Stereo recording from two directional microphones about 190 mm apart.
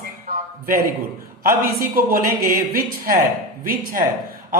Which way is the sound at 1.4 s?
50° right (ahead or behind).